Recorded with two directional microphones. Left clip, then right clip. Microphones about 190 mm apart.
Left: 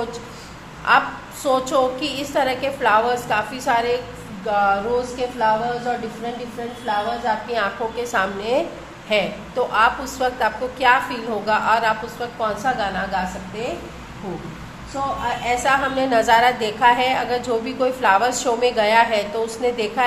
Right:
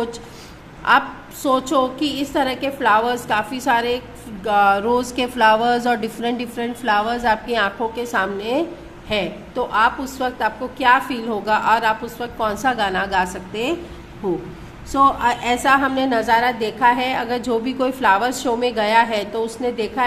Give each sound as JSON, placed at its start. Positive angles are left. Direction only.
{"t": 0.8, "sound": "a woman's voice", "side_deg": -25}
{"t": 15.2, "sound": "a woman's voice", "side_deg": -25}